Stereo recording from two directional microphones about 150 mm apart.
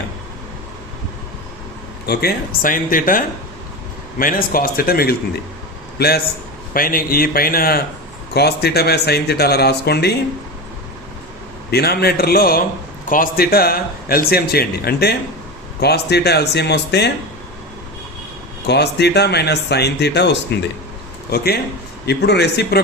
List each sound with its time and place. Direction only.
2.0 s speech: 80° left
6.7 s a man's voice: 75° left (ahead or behind)
8.3 s a man's voice: 90° left
11.7 s a man's voice: 90° left
18.8 s a man's voice: 90° left